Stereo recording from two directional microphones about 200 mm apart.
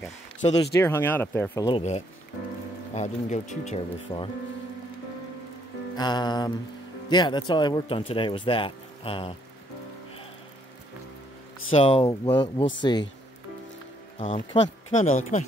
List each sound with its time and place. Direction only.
0.0 s a sound: 20° left (ahead or behind)
0.7 s speech: 10° left (ahead or behind)
1.7 s speech: 35° left (ahead or behind)
5.9 s speech: 20° left (ahead or behind)
11.7 s speech: 25° left (ahead or behind)
14.1 s speech: 30° left (ahead or behind)